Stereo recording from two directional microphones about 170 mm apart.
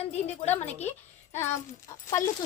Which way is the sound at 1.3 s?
15° left (ahead or behind).